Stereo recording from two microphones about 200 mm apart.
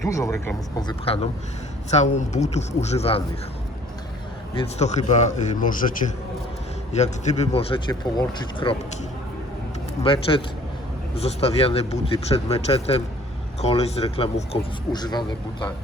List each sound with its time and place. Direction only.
0.0 s speech: 15° left (ahead or behind)
4.5 s speech: 35° left (ahead or behind)
10.0 s speech: 25° left (ahead or behind)
14.9 s speech: 20° left (ahead or behind)